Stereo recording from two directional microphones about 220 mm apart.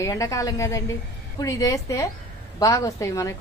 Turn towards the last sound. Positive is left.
turn(degrees=15)  # may be behind; listen again after turning